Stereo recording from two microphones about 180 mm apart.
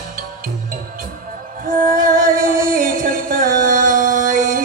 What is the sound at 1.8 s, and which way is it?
Music, 50° right (ahead or behind).